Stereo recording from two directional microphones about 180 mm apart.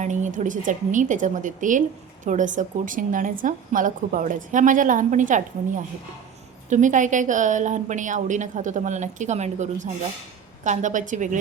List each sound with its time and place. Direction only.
0.0 s a woman's voice: 45° right (ahead or behind)